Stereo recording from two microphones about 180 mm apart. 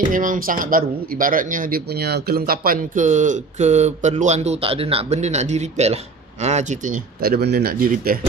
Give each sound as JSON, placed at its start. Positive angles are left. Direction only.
{"t": 0.1, "sound": "speech", "side_deg": -50}